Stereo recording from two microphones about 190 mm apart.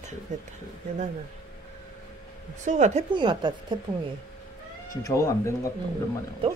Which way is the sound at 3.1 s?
25° right (ahead or behind).